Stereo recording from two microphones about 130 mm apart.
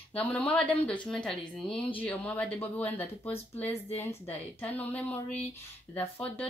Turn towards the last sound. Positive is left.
turn(degrees=10)  # may be behind; listen again after turning